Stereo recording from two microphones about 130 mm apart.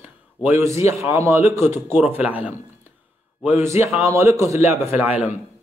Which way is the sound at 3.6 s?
20° right (ahead or behind).